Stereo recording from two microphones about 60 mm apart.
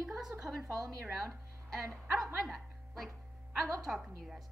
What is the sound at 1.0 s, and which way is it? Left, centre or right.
Speech, centre.